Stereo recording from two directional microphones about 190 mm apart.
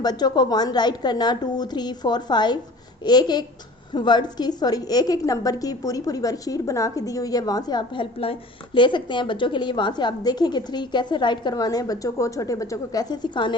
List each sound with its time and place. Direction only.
0.0 s a woman's voice: 20° left (ahead or behind)